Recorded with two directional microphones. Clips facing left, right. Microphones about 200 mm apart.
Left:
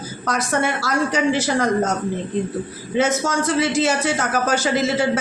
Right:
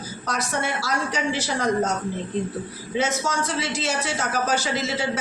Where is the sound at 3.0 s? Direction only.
50° left (ahead or behind).